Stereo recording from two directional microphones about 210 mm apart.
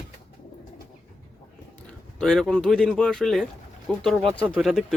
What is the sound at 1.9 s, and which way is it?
Speech, 5° left (ahead or behind).